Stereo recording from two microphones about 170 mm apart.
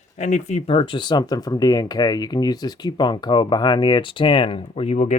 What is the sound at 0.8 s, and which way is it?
Speech, 30° left (ahead or behind).